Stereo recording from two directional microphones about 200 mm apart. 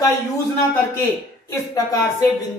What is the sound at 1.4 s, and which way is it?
Speech, 15° left (ahead or behind).